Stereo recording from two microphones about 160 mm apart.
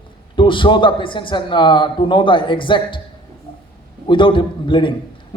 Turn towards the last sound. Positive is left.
turn(degrees=30)  # may be behind; listen again after turning